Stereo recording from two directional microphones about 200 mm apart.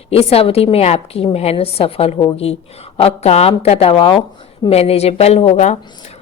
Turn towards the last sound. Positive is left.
turn(degrees=35)  # may be behind; listen again after turning